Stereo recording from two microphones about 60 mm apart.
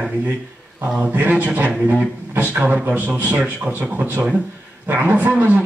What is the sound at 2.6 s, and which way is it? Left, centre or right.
Speech, right.